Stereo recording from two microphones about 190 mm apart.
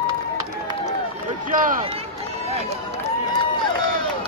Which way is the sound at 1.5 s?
45° right (ahead or behind).